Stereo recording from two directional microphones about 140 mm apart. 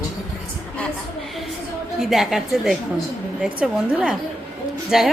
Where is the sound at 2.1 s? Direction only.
5° right (ahead or behind).